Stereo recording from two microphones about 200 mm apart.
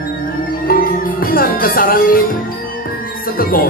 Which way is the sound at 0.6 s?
45° left (ahead or behind).